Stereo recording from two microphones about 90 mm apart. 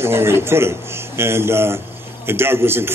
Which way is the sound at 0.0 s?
25° right (ahead or behind).